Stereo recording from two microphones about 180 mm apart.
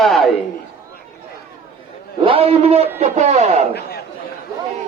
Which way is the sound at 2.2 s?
30° right (ahead or behind).